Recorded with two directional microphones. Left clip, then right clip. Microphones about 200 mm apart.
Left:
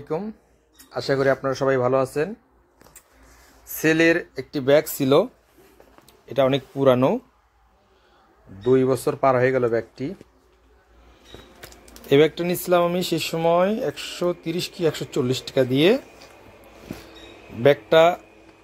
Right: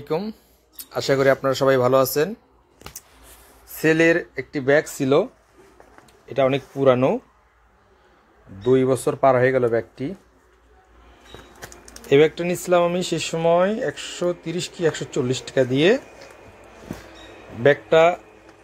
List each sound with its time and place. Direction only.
0.0 s speech: 20° right (ahead or behind)
3.7 s speech: centre (ahead or behind)
4.4 s speech: 15° left (ahead or behind)
8.6 s speech: centre (ahead or behind)
11.9 s speech: 20° left (ahead or behind)
17.6 s speech: 20° left (ahead or behind)